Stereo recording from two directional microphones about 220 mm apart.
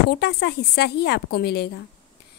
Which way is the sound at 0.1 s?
45° left (ahead or behind).